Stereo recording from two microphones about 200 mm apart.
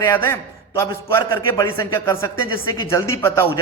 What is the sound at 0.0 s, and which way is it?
A man's voice, 10° left (ahead or behind).